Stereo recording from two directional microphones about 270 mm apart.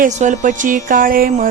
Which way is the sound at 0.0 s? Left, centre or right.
Right.